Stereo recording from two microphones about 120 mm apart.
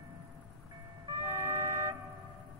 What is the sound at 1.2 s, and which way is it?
Vehicle, 30° right (ahead or behind).